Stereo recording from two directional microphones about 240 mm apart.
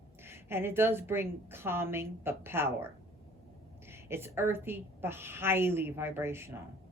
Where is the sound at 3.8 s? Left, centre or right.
Centre.